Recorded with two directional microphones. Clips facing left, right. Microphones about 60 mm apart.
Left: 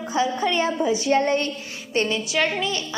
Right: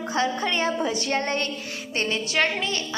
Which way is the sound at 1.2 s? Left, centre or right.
Right.